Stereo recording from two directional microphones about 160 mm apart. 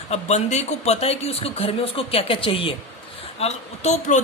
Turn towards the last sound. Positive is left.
turn(degrees=45)  # may be behind; listen again after turning